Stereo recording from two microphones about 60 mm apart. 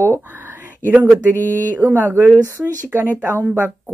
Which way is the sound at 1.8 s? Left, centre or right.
Right.